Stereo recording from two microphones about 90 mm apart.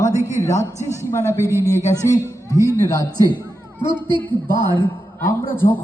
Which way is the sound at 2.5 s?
30° right (ahead or behind).